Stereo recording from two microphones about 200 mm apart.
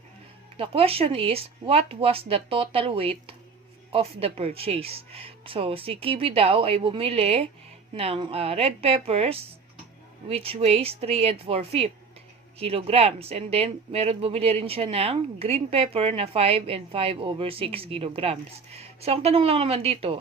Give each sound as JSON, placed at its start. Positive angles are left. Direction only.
{"t": 0.5, "sound": "speech", "side_deg": -30}